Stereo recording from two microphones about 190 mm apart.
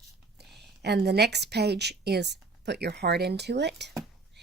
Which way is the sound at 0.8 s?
60° right (ahead or behind).